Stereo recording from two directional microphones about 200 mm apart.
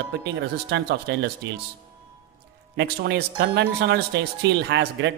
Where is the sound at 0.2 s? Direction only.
55° right (ahead or behind).